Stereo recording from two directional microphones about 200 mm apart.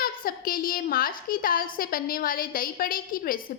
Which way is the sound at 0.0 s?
45° left (ahead or behind).